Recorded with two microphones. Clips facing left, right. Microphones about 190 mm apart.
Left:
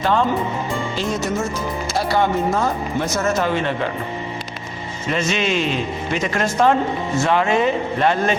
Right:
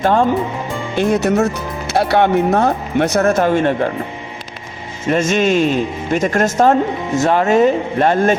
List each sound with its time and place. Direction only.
0.0 s speech: 50° right (ahead or behind)
0.9 s speech: 60° right (ahead or behind)
5.0 s speech: 45° right (ahead or behind)